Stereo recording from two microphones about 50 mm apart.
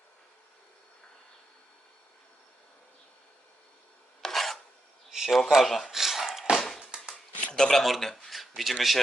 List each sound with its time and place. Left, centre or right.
4.2 s filing: centre
5.1 s a sound: centre
7.5 s speech: centre